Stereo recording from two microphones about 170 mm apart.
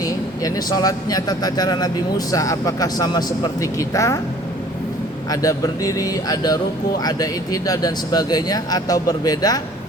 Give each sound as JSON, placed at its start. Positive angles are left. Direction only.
{"t": 0.0, "sound": "speech", "side_deg": 20}
{"t": 5.3, "sound": "speech", "side_deg": 20}